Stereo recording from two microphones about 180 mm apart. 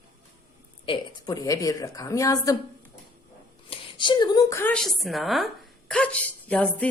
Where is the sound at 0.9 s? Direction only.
20° left (ahead or behind).